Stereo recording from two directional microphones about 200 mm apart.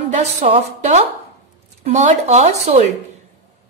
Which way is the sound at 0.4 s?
35° right (ahead or behind).